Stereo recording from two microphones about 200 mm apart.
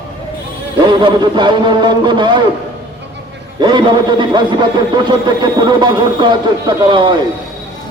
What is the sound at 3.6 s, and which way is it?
A man's voice, 20° right (ahead or behind).